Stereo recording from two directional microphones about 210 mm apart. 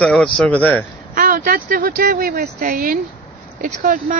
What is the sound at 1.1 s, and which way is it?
Speech, 40° right (ahead or behind).